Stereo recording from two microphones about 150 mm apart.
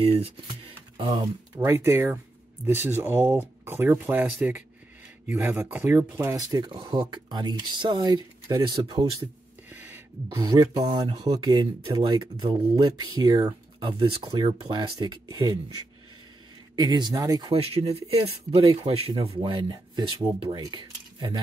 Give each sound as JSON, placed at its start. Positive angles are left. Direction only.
{"t": 0.0, "sound": "speech", "side_deg": -40}
{"t": 1.6, "sound": "speech", "side_deg": -15}
{"t": 9.2, "sound": "a sound", "side_deg": -15}
{"t": 10.3, "sound": "speech", "side_deg": -25}
{"t": 16.7, "sound": "speech", "side_deg": -30}
{"t": 17.5, "sound": "speech", "side_deg": -40}
{"t": 20.6, "sound": "cutlery", "side_deg": -30}